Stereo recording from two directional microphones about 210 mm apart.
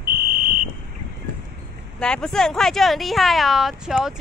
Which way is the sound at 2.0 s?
5° left (ahead or behind).